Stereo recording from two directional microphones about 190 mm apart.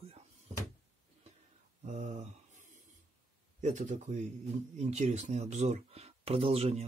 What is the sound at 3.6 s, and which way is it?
Speech, 40° right (ahead or behind).